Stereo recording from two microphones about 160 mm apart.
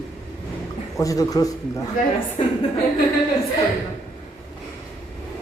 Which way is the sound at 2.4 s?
40° left (ahead or behind).